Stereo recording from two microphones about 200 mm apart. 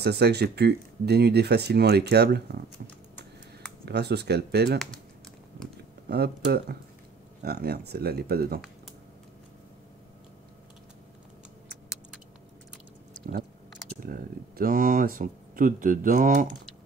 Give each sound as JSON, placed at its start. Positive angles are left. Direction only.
{"t": 0.0, "sound": "speech", "side_deg": -55}
{"t": 3.8, "sound": "speech", "side_deg": -55}
{"t": 6.0, "sound": "speech", "side_deg": -50}
{"t": 13.9, "sound": "speech", "side_deg": -45}